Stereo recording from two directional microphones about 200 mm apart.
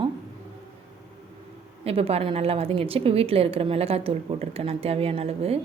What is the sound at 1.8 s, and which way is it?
A woman's voice, 30° right (ahead or behind).